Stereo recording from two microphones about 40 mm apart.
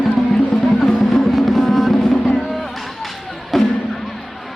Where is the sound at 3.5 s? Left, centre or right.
Centre.